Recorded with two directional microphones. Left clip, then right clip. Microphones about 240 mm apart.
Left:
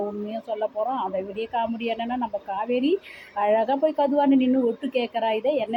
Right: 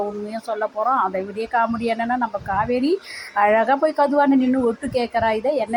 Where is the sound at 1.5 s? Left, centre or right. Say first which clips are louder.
Right 8 dB; centre.